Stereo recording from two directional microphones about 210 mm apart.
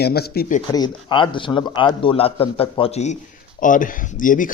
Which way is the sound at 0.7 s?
20° left (ahead or behind).